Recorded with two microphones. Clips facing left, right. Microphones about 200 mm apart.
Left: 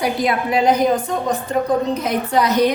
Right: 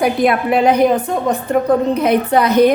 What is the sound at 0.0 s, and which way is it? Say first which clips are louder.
A woman's voice: right 5 dB; 55° right (ahead or behind).